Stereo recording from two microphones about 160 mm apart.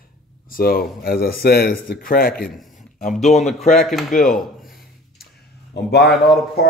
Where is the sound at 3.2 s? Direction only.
45° left (ahead or behind).